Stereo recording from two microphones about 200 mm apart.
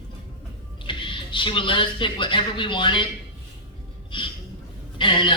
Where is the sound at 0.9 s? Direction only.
25° left (ahead or behind).